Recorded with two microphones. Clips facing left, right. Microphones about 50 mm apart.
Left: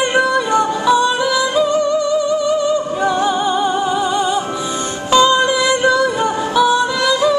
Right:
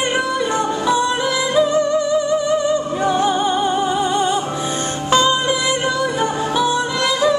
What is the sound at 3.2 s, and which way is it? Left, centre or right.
Music, right.